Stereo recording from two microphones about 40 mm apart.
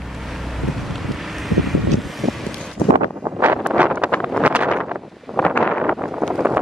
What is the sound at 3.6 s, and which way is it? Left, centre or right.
Wind noise, right.